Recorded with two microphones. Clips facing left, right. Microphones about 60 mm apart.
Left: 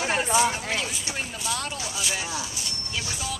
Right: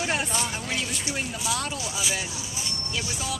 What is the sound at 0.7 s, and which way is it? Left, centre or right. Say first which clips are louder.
Speech: even; centre.